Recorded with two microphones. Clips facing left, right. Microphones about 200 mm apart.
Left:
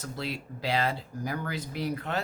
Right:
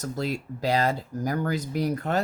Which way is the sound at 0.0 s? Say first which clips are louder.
Right 6 dB; 45° right (ahead or behind).